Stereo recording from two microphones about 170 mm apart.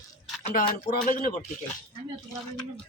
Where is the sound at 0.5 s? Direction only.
55° left (ahead or behind).